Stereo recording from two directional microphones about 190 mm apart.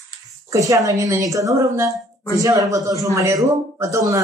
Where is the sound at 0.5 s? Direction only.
15° right (ahead or behind).